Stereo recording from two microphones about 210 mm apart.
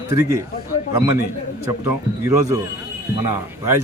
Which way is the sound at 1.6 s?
10° right (ahead or behind).